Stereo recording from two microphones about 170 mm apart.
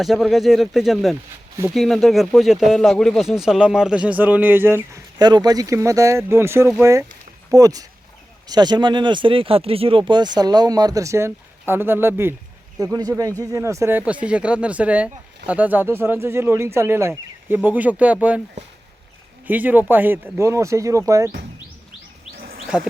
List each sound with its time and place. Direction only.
0.0 s speech: centre (ahead or behind)
19.5 s speech: 10° right (ahead or behind)
22.7 s speech: 10° right (ahead or behind)